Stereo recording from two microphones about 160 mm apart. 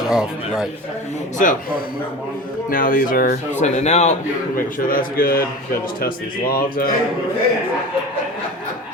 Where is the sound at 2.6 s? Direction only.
60° left (ahead or behind).